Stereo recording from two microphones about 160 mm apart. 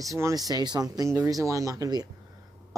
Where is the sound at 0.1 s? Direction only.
20° right (ahead or behind).